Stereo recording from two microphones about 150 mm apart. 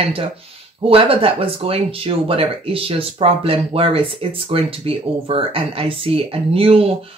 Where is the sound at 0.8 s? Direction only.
40° right (ahead or behind).